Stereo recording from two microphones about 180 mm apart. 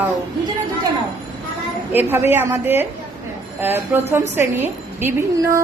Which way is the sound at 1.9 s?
10° right (ahead or behind).